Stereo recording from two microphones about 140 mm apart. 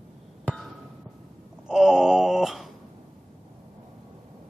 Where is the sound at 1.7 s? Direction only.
5° right (ahead or behind).